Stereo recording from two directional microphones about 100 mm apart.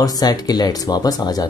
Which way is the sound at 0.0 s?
40° left (ahead or behind).